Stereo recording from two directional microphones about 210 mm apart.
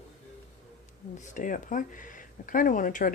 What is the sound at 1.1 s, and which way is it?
Speech, 35° left (ahead or behind).